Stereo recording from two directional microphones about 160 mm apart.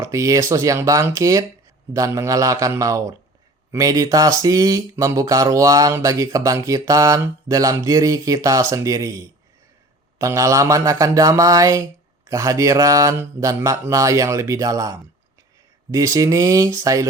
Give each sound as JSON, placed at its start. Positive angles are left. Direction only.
{"t": 0.0, "sound": "speech", "side_deg": -20}